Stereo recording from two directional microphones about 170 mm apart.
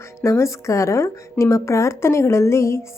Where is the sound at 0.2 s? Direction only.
15° left (ahead or behind).